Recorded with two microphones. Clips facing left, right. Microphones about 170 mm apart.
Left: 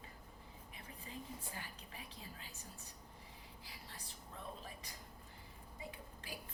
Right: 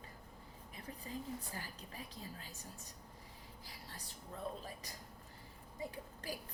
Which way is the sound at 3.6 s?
40° right (ahead or behind).